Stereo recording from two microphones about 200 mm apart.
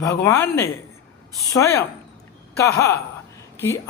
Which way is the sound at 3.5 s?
10° left (ahead or behind).